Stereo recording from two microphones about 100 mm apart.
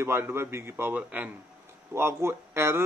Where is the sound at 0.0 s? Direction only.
25° right (ahead or behind).